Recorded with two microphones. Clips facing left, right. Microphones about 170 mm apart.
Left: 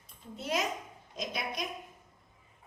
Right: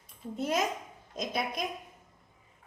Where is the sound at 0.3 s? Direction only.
50° right (ahead or behind).